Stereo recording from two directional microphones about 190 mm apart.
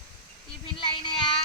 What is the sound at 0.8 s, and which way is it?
Child singing, 25° left (ahead or behind).